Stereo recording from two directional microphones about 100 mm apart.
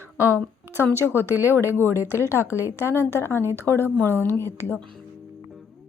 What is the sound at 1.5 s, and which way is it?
Speech, 25° left (ahead or behind).